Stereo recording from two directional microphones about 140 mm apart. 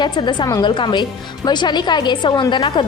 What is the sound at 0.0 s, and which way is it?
A woman's voice, 35° left (ahead or behind).